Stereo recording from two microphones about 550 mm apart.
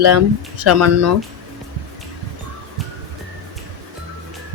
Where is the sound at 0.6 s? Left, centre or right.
Right.